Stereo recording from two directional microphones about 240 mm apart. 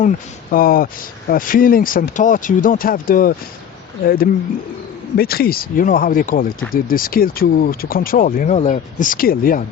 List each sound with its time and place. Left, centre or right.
0.5 s speech: left